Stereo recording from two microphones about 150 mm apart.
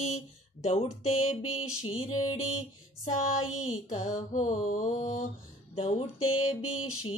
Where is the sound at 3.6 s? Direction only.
55° left (ahead or behind).